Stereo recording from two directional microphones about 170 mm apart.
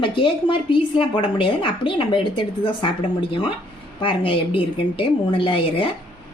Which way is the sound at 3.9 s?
30° left (ahead or behind).